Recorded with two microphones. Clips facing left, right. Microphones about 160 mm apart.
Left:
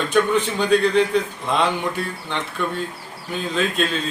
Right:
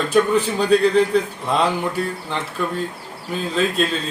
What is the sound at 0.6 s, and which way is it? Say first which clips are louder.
Speech: right 2 dB; 35° right (ahead or behind).